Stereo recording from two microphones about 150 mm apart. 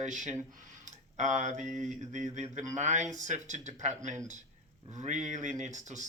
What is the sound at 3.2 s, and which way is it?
Speech, 55° right (ahead or behind).